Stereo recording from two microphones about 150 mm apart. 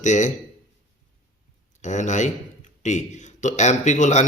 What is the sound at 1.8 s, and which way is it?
Speech, 55° left (ahead or behind).